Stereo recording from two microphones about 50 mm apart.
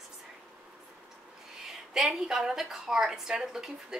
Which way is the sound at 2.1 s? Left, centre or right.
Centre.